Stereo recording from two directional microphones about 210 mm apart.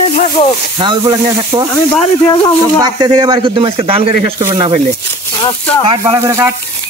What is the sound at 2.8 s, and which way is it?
A man's voice, 20° right (ahead or behind).